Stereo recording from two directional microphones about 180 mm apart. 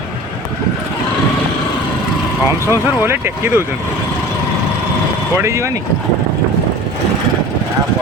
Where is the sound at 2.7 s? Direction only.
15° right (ahead or behind).